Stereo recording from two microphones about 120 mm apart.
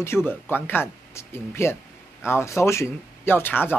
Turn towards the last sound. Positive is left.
turn(degrees=15)  # may be behind; listen again after turning